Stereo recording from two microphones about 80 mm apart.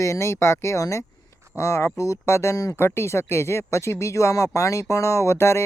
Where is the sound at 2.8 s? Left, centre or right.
Left.